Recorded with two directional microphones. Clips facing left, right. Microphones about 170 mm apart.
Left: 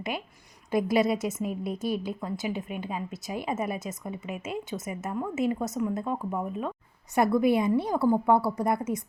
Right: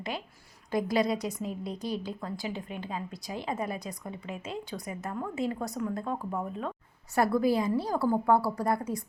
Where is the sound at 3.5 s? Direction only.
20° left (ahead or behind).